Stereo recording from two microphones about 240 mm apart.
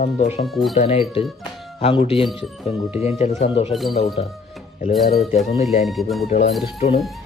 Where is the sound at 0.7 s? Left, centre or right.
Left.